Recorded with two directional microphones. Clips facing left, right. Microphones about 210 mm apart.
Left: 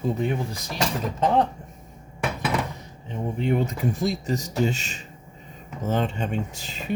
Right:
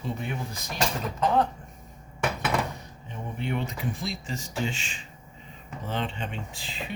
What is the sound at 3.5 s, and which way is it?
Speech, 45° left (ahead or behind).